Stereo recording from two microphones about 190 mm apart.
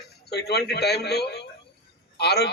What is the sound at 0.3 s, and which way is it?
A man's voice, 60° left (ahead or behind).